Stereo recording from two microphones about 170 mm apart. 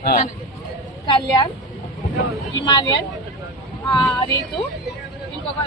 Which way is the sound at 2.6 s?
25° left (ahead or behind).